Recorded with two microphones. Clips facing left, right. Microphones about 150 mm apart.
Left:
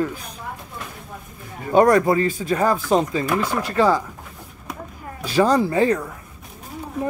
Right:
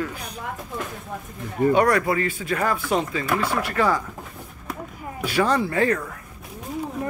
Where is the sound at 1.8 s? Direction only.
25° left (ahead or behind).